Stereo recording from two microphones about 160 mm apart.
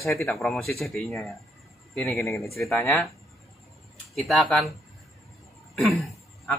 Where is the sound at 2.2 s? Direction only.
20° left (ahead or behind).